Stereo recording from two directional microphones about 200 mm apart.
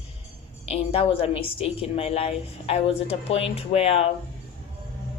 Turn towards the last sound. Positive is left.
turn(degrees=30)  # may be behind; listen again after turning